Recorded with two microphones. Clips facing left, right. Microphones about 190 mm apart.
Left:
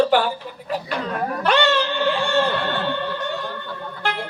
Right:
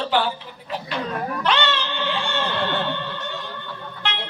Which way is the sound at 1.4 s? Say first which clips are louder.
Left 5 dB; 45° left (ahead or behind).